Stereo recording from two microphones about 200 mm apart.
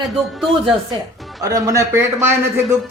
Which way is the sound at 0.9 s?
20° right (ahead or behind).